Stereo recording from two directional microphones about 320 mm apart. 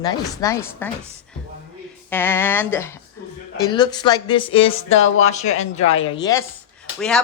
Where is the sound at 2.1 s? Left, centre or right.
Centre.